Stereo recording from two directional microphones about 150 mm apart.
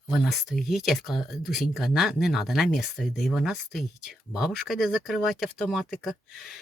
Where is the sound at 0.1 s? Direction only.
Centre (ahead or behind).